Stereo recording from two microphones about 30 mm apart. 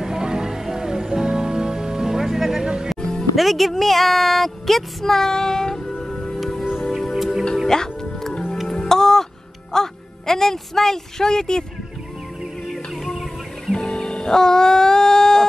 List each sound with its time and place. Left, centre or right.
0.0 s music: centre
3.0 s music: centre
3.3 s speech: centre
7.0 s music: centre
7.6 s music: centre
9.7 s a woman's voice: centre
13.7 s music: left